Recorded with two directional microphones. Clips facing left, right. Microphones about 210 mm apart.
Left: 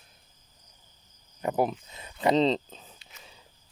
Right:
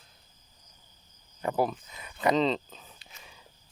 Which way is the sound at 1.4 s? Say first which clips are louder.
Left 1 dB; 20° left (ahead or behind).